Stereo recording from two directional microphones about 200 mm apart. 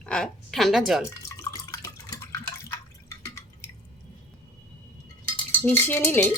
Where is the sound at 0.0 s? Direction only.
5° left (ahead or behind).